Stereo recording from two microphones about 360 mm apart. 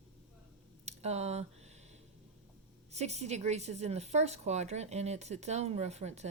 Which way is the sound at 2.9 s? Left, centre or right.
Centre.